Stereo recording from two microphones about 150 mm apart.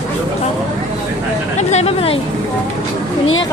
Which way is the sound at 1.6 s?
45° left (ahead or behind).